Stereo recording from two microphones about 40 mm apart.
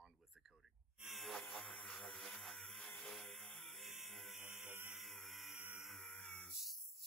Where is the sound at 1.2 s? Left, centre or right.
Centre.